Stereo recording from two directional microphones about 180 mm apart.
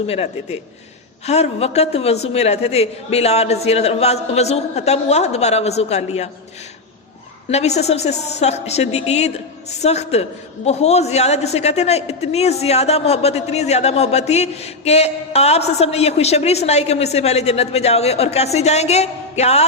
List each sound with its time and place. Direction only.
0.1 s a man's voice: 35° left (ahead or behind)
7.5 s a man's voice: 35° left (ahead or behind)